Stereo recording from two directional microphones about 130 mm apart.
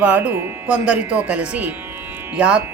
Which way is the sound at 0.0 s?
10° right (ahead or behind).